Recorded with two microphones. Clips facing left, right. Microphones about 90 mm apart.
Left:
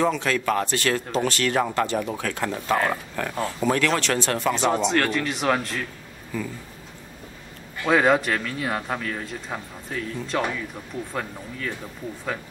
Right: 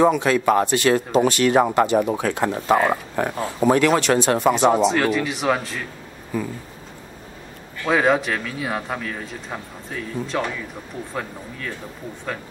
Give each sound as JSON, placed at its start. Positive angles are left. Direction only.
{"t": 0.0, "sound": "speech", "side_deg": -20}
{"t": 4.6, "sound": "speech", "side_deg": -5}
{"t": 6.3, "sound": "speech", "side_deg": -15}
{"t": 7.8, "sound": "speech", "side_deg": 0}